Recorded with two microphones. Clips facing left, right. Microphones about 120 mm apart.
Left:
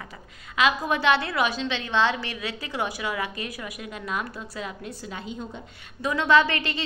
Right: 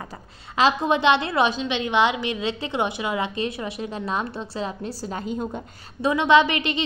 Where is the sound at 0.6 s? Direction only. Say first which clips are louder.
Right 4 dB; 30° right (ahead or behind); by 5.6 s 45° right (ahead or behind).